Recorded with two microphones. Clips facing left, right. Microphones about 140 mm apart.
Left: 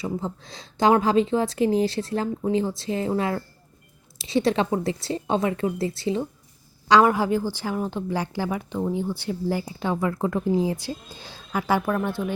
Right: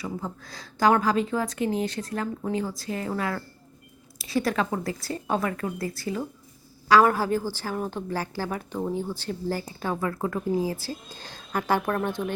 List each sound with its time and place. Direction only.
0.0 s a woman's voice: 25° left (ahead or behind); by 11.9 s 10° left (ahead or behind)
12.2 s speech: centre (ahead or behind)